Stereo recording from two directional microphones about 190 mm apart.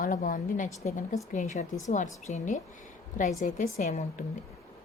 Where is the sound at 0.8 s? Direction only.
15° left (ahead or behind).